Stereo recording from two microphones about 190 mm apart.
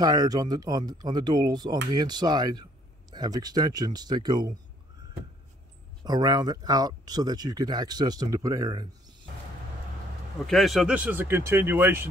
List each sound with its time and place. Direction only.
0.0 s speech: 20° right (ahead or behind)
6.0 s speech: 20° right (ahead or behind)
10.4 s speech: centre (ahead or behind)